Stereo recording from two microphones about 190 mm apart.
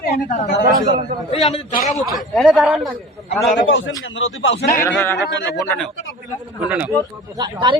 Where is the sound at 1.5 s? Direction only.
40° left (ahead or behind).